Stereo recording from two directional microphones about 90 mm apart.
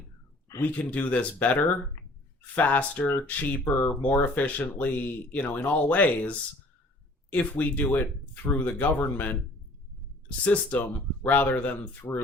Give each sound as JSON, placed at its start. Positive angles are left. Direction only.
{"t": 0.6, "sound": "speech", "side_deg": 15}